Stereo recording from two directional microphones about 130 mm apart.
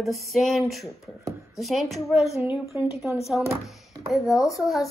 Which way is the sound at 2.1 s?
55° left (ahead or behind).